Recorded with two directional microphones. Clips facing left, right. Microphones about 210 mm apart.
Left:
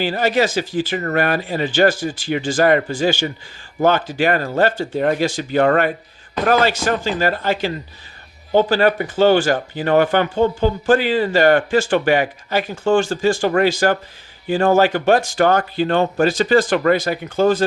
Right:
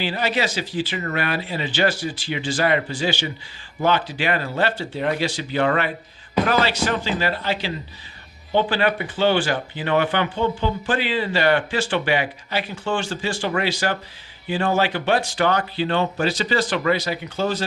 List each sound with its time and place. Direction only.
0.0 s speech: 45° left (ahead or behind)